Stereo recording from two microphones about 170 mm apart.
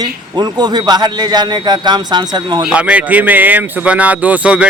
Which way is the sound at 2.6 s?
5° right (ahead or behind).